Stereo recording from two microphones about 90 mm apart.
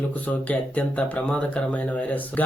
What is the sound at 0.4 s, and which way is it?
Speech, 15° left (ahead or behind).